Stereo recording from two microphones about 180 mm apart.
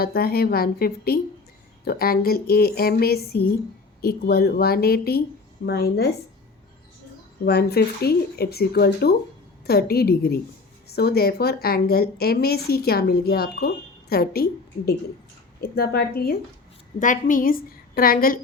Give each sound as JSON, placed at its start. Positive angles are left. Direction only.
{"t": 0.0, "sound": "a woman's voice", "side_deg": 55}
{"t": 7.4, "sound": "a woman's voice", "side_deg": 65}
{"t": 17.0, "sound": "a woman's voice", "side_deg": 45}